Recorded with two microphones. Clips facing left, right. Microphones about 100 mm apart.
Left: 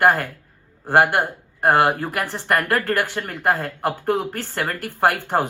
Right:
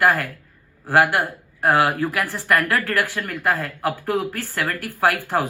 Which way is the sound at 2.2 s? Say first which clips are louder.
Even; 25° left (ahead or behind).